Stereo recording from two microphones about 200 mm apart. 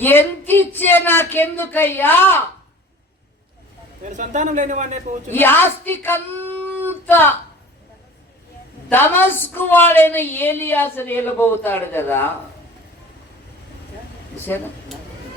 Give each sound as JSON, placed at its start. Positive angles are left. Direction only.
{"t": 0.0, "sound": "a woman's voice", "side_deg": 10}
{"t": 4.0, "sound": "speech", "side_deg": -40}
{"t": 5.3, "sound": "a woman's voice", "side_deg": 10}
{"t": 8.9, "sound": "a woman's voice", "side_deg": 10}